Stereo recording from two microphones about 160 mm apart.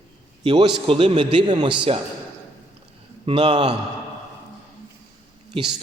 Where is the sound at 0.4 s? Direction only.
30° right (ahead or behind).